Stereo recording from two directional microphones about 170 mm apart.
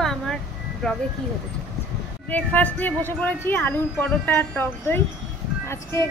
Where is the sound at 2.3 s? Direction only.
10° left (ahead or behind).